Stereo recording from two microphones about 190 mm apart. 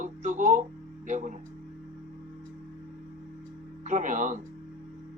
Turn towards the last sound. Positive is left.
turn(degrees=-40)  # may be behind; listen again after turning